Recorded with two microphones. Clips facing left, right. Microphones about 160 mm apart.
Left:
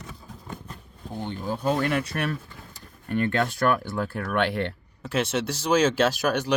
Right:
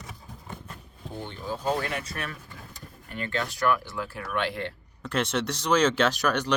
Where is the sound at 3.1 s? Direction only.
55° left (ahead or behind).